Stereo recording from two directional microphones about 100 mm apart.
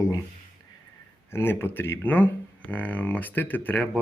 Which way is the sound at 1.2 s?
25° left (ahead or behind).